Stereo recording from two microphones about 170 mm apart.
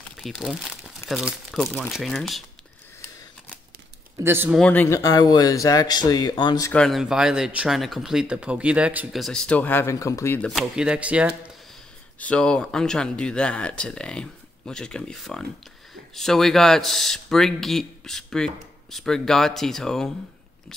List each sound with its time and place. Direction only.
0.2 s speech: centre (ahead or behind)
4.2 s speech: 15° right (ahead or behind)
4.6 s speech: 10° left (ahead or behind); by 6.7 s 25° left (ahead or behind)
6.7 s speech: 5° left (ahead or behind)
10.5 s speech: 5° right (ahead or behind)
12.2 s speech: 5° left (ahead or behind)